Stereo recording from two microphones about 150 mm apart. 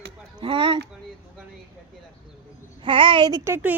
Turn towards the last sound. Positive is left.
turn(degrees=-15)  # may be behind; listen again after turning